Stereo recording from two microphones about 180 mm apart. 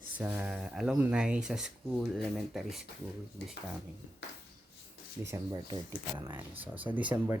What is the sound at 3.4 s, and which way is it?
Speech, 65° left (ahead or behind).